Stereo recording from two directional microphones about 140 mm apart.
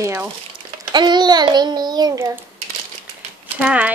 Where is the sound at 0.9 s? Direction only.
30° right (ahead or behind).